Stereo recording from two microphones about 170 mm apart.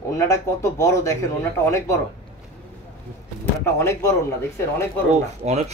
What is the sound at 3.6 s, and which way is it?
Speech, 15° left (ahead or behind).